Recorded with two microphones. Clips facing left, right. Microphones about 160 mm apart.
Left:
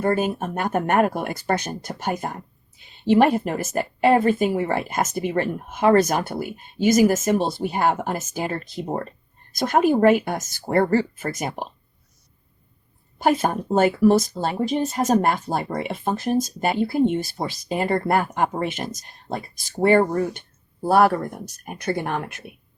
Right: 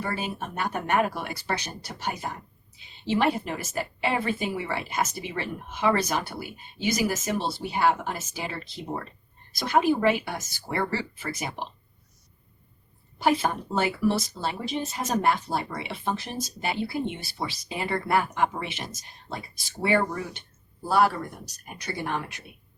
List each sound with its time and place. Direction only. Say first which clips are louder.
0.0 s speech: left 10 dB; 50° left (ahead or behind)
13.1 s speech: left 4 dB; 50° left (ahead or behind)